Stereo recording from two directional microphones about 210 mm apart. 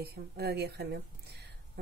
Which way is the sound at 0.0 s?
50° right (ahead or behind).